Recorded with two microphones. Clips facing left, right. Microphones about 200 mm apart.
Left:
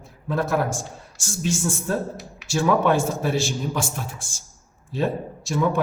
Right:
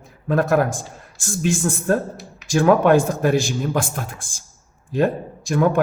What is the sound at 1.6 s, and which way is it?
A man's voice, 55° right (ahead or behind).